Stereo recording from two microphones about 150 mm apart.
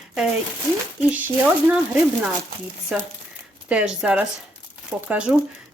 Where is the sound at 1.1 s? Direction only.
10° right (ahead or behind).